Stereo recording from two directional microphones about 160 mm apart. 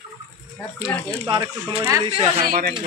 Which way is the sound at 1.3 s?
30° right (ahead or behind).